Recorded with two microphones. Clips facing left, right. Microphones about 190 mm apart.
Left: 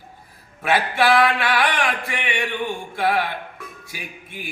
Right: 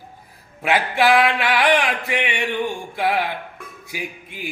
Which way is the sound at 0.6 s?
15° right (ahead or behind).